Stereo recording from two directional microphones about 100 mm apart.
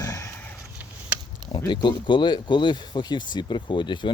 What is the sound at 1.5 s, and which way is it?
Speech, 45° left (ahead or behind).